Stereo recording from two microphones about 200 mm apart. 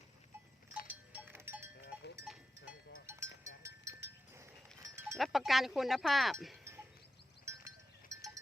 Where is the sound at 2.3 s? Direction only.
Centre (ahead or behind).